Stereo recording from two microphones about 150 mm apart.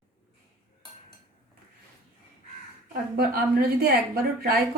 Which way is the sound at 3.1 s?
90° right.